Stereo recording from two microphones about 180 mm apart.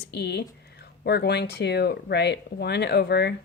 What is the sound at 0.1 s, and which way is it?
Speech, 70° left (ahead or behind).